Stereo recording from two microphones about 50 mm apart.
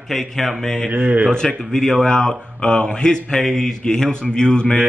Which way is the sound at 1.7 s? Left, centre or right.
Centre.